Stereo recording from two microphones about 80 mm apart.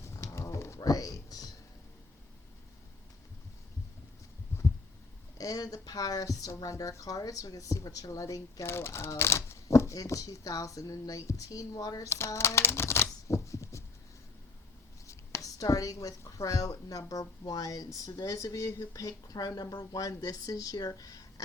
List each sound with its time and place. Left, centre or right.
0.0 s a sound: left
5.4 s speech: left
8.6 s speech: left
12.0 s shuffling cards: left
15.0 s speech: left